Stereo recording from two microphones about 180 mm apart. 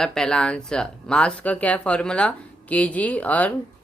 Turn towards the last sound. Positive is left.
turn(degrees=10)  # may be behind; listen again after turning